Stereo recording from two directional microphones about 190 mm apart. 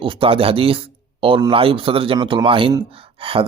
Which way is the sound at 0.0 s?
30° right (ahead or behind).